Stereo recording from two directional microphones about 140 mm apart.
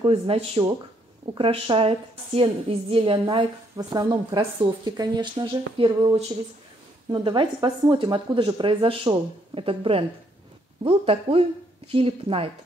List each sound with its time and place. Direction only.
0.0 s speech: 40° right (ahead or behind)
3.7 s speech: 25° right (ahead or behind); by 12.4 s 40° right (ahead or behind)